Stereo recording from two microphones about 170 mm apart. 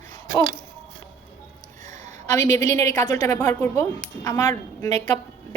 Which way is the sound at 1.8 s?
45° right (ahead or behind).